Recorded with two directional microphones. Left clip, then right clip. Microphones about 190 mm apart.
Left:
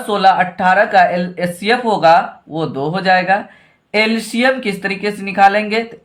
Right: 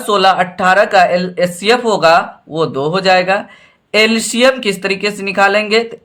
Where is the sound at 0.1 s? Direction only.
30° right (ahead or behind).